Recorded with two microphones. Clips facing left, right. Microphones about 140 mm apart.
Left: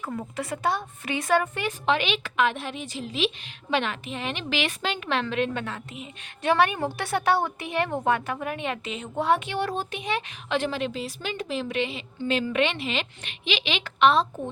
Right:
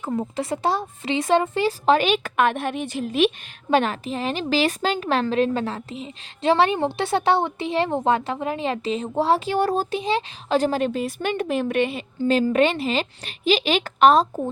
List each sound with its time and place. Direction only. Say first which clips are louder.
0.0 s speech: right 6 dB; 25° right (ahead or behind); by 14.4 s 40° right (ahead or behind)